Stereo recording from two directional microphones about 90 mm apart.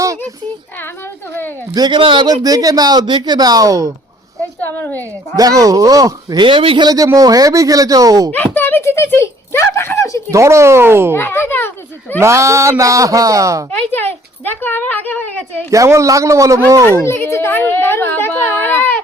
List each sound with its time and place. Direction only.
1.7 s speech: 50° right (ahead or behind)
2.0 s speech: 70° right (ahead or behind)
2.2 s speech: 45° right (ahead or behind)
4.6 s a woman's voice: 20° left (ahead or behind)
5.4 s speech: 40° right (ahead or behind)
6.4 s speech: 75° right (ahead or behind)
6.8 s speech: 40° right (ahead or behind)
8.3 s speech: 20° left (ahead or behind)
10.3 s speech: 35° right (ahead or behind)
11.1 s speech: 25° left (ahead or behind)
12.2 s speech: 30° right (ahead or behind)
13.7 s speech: 20° left (ahead or behind)
15.7 s speech: 35° right (ahead or behind)
17.0 s speech: 30° left (ahead or behind)